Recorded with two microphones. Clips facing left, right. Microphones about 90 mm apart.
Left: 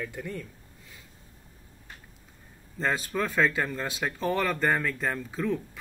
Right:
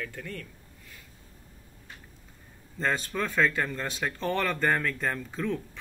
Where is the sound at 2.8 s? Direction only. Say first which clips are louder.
Left 1 dB; 5° left (ahead or behind).